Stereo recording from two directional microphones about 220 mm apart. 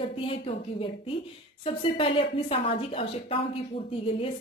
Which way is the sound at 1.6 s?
25° left (ahead or behind).